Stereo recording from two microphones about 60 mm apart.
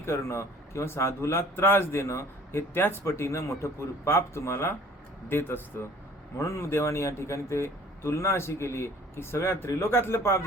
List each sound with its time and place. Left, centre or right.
0.0 s speech: left